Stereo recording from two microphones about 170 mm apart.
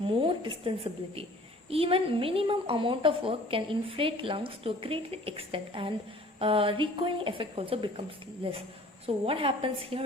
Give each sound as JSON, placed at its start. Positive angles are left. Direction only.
{"t": 0.0, "sound": "a woman's voice", "side_deg": -30}